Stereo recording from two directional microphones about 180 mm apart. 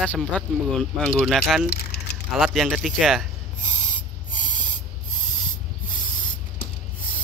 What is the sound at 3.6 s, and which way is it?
Spray, 45° left (ahead or behind).